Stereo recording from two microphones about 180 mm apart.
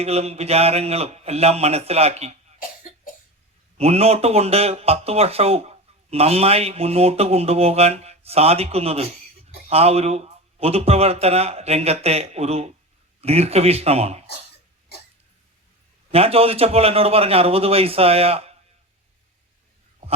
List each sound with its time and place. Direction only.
0.0 s speech: 35° right (ahead or behind)
3.8 s speech: 35° right (ahead or behind)
16.1 s speech: 35° right (ahead or behind)